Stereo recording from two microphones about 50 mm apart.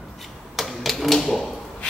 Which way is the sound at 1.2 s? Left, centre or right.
Centre.